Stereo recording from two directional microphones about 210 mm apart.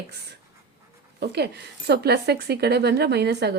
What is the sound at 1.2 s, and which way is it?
A woman's voice, 50° right (ahead or behind).